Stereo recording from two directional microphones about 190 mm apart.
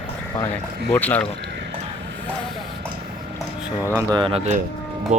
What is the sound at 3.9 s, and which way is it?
Speech, 25° right (ahead or behind).